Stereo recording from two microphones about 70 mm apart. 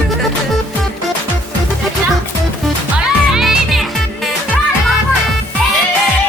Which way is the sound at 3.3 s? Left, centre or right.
Centre.